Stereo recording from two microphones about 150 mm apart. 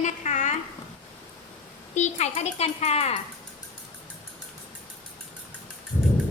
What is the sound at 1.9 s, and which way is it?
A child's voice, 50° left (ahead or behind).